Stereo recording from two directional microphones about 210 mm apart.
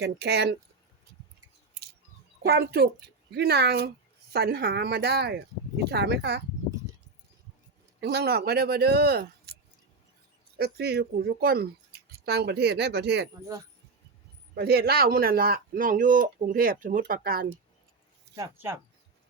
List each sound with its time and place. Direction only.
0.0 s speech: 50° right (ahead or behind)
2.4 s speech: 50° right (ahead or behind)
8.0 s speech: 50° right (ahead or behind)
10.6 s speech: 50° right (ahead or behind)
14.5 s speech: 45° right (ahead or behind)
18.3 s speech: 10° right (ahead or behind)